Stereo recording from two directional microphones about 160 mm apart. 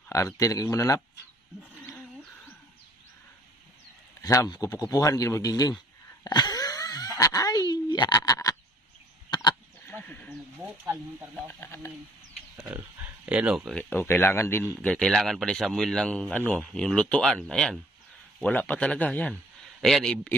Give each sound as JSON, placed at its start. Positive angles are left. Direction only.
{"t": 0.4, "sound": "a man's voice", "side_deg": 20}
{"t": 1.9, "sound": "wild animals", "side_deg": 10}
{"t": 4.2, "sound": "a man's voice", "side_deg": 20}
{"t": 6.2, "sound": "a sound", "side_deg": 25}
{"t": 9.3, "sound": "sheep", "side_deg": 25}
{"t": 9.8, "sound": "horse", "side_deg": 10}
{"t": 11.3, "sound": "speech", "side_deg": 15}
{"t": 12.5, "sound": "speech", "side_deg": -10}
{"t": 13.7, "sound": "speech", "side_deg": 15}
{"t": 14.8, "sound": "a man's voice", "side_deg": 5}